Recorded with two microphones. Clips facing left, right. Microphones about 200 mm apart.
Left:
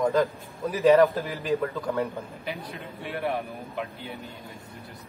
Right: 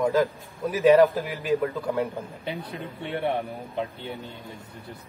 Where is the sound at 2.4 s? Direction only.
30° right (ahead or behind).